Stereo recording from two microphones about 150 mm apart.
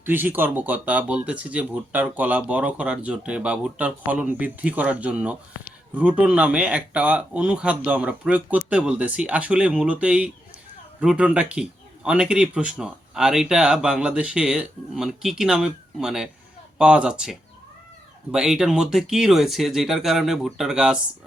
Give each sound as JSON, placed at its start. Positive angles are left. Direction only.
{"t": 0.0, "sound": "speech", "side_deg": -15}